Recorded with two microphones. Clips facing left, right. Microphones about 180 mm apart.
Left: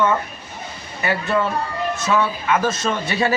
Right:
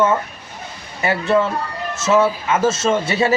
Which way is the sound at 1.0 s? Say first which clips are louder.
Right 4 dB; 25° right (ahead or behind).